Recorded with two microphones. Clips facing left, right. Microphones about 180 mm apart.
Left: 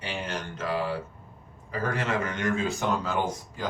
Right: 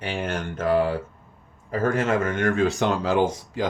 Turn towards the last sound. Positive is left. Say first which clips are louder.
# right 7 dB
turn(degrees=-90)